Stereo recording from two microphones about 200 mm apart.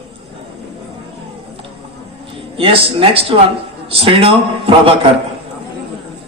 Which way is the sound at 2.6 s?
25° right (ahead or behind).